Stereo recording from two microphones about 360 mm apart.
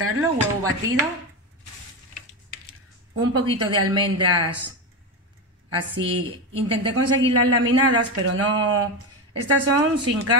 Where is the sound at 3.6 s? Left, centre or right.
Right.